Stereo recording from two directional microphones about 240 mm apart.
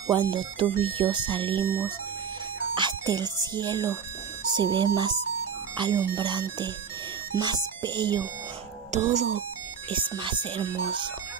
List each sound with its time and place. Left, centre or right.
0.0 s speech: centre
2.7 s speech: centre
8.9 s speech: right